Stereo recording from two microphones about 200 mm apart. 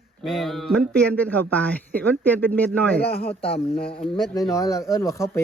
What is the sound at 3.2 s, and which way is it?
Speech, 30° left (ahead or behind).